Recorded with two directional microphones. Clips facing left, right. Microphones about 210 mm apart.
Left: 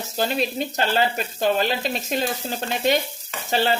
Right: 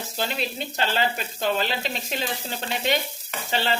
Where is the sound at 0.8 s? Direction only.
45° left (ahead or behind).